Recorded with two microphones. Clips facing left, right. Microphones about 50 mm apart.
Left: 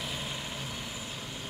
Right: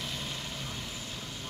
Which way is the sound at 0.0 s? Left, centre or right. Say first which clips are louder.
Left 1 dB; centre.